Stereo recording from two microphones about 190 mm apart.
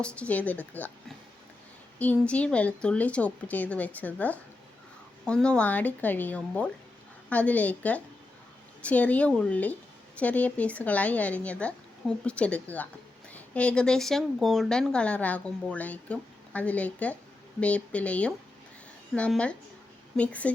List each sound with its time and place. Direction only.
0.0 s a woman's voice: 5° left (ahead or behind)